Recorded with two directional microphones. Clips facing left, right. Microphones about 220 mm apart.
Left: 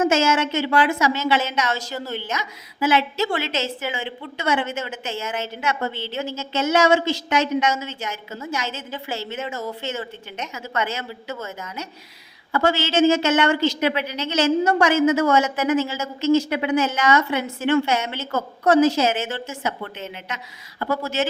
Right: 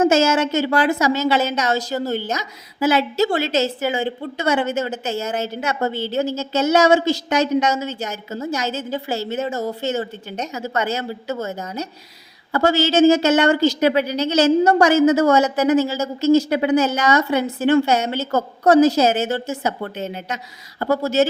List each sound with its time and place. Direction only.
0.0 s a woman's voice: 40° right (ahead or behind)